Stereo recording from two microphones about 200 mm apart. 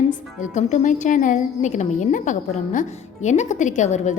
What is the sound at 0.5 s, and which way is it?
A woman's voice, 35° left (ahead or behind).